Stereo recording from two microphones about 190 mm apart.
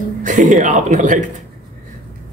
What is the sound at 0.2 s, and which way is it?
Speech, 45° right (ahead or behind).